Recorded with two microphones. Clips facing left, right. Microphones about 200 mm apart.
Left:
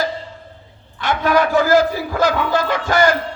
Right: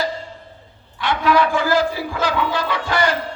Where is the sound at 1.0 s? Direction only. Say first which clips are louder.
Left 1 dB; 45° left (ahead or behind).